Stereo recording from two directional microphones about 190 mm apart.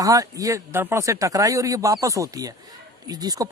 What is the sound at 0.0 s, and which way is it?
Speech, 20° right (ahead or behind).